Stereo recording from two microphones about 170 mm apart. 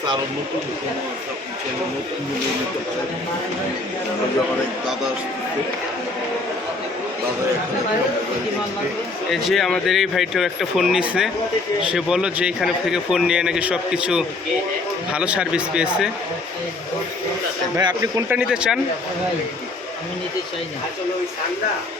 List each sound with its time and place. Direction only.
9.3 s a man's voice: centre (ahead or behind)
17.7 s a man's voice: 25° right (ahead or behind)
18.3 s a man's voice: 5° right (ahead or behind)